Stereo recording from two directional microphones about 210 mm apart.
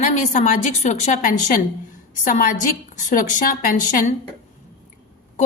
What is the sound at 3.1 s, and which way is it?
Speech, 40° left (ahead or behind).